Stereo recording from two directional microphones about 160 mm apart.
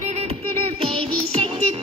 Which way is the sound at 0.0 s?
40° right (ahead or behind).